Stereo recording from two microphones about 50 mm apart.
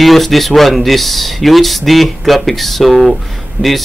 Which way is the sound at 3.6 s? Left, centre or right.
Right.